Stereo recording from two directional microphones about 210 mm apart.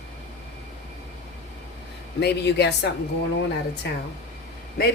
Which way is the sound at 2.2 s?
55° left (ahead or behind).